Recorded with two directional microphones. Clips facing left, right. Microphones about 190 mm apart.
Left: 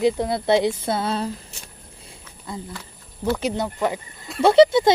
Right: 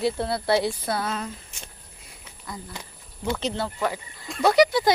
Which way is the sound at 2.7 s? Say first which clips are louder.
Left 2 dB; 15° right (ahead or behind).